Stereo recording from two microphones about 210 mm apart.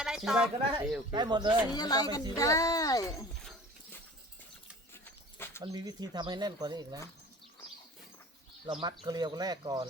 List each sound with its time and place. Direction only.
0.0 s a sound: 5° right (ahead or behind)
0.8 s speech: 5° right (ahead or behind)
1.1 s speech: 20° right (ahead or behind)
1.7 s speech: 20° left (ahead or behind)
5.0 s a sound: 10° left (ahead or behind)
5.6 s speech: 20° right (ahead or behind)
8.6 s speech: 20° right (ahead or behind)